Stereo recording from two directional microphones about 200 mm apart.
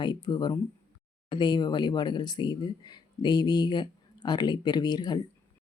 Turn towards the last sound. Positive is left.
turn(degrees=20)  # may be behind; listen again after turning